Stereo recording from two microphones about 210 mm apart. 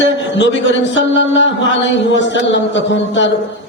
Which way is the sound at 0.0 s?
60° left (ahead or behind).